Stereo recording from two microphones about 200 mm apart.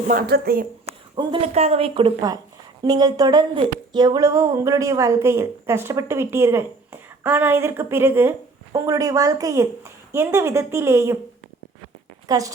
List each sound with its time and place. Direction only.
0.1 s speech: 50° right (ahead or behind)
1.1 s a woman's voice: 25° right (ahead or behind)
12.3 s speech: 15° right (ahead or behind)